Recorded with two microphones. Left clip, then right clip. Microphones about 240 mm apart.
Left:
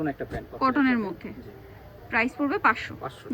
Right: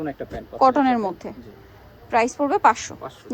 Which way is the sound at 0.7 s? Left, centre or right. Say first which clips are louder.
Right 4 dB; centre.